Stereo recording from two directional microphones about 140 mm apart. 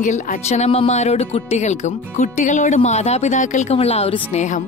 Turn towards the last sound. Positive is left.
turn(degrees=55)  # may be behind; listen again after turning